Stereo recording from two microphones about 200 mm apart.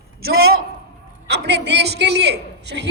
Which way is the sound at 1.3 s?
60° right (ahead or behind).